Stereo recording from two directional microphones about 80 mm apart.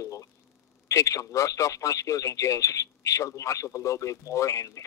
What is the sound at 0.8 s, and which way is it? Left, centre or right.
A man's voice, left.